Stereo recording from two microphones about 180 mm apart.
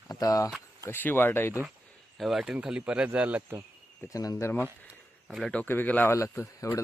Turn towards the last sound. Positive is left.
turn(degrees=15)  # may be behind; listen again after turning